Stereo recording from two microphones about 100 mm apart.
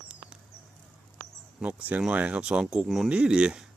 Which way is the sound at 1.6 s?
15° right (ahead or behind).